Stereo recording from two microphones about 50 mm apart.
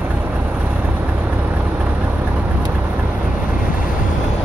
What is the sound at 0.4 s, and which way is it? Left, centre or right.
Vehicle, right.